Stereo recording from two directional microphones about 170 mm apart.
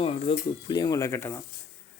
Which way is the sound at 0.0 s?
35° left (ahead or behind).